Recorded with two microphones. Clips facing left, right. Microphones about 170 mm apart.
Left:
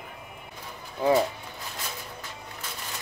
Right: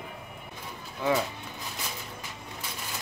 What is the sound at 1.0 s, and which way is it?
Speech, 35° left (ahead or behind).